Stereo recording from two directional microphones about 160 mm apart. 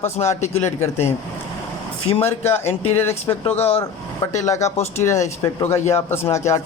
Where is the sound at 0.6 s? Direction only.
15° left (ahead or behind).